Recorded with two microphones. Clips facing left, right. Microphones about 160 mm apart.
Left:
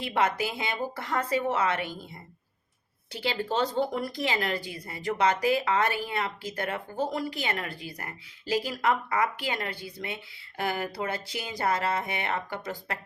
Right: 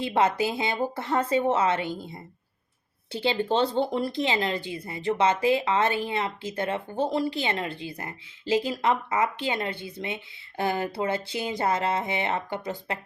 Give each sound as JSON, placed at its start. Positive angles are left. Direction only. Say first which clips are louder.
{"t": 0.0, "sound": "speech", "louder": "right 4 dB", "side_deg": -25}